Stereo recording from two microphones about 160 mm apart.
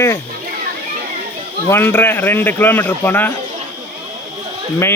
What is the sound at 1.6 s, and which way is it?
A man's voice, 15° left (ahead or behind).